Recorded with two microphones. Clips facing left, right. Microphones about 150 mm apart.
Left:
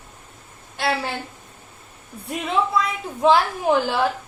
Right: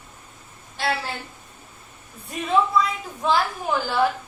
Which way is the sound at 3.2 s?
60° left (ahead or behind).